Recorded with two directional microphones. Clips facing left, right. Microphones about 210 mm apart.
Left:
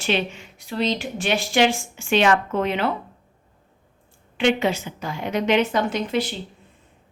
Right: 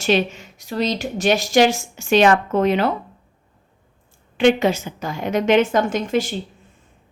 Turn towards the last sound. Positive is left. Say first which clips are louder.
# right 3 dB
turn(degrees=-45)  # may be behind; listen again after turning